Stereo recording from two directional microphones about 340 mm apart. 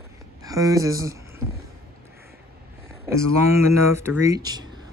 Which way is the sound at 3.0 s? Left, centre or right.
Centre.